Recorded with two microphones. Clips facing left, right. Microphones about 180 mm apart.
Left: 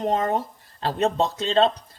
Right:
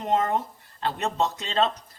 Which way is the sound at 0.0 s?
35° left (ahead or behind).